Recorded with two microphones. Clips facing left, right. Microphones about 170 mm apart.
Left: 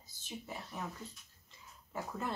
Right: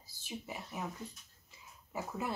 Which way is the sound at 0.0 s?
10° right (ahead or behind).